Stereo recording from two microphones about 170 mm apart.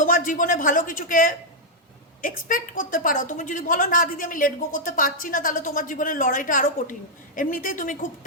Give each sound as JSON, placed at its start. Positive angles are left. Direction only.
{"t": 0.0, "sound": "a man's voice", "side_deg": 50}